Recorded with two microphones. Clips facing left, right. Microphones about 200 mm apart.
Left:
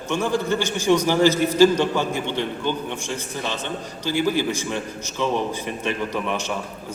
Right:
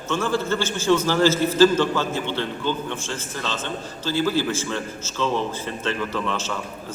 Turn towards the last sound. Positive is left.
turn(degrees=15)  # may be behind; listen again after turning